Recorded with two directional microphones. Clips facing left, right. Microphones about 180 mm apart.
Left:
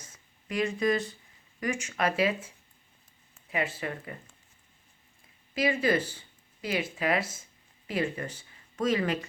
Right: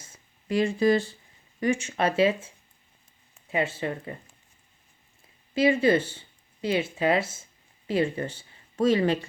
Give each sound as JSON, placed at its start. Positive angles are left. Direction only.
{"t": 0.0, "sound": "a sound", "side_deg": -30}
{"t": 1.6, "sound": "speech", "side_deg": -25}
{"t": 3.5, "sound": "speech", "side_deg": -25}
{"t": 5.5, "sound": "speech", "side_deg": -25}